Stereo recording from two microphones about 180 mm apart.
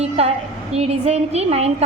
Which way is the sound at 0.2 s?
35° right (ahead or behind).